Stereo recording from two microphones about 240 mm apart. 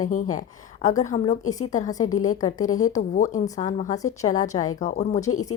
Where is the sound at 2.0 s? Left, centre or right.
Left.